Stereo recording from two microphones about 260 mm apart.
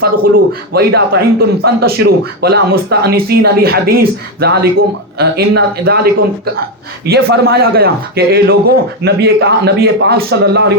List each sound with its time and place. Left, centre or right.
0.0 s a man's voice: right